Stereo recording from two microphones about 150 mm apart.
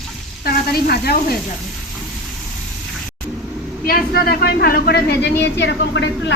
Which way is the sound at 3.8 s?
85° left.